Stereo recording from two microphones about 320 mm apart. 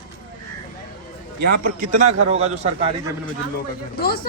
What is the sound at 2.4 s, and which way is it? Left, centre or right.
Speech, centre.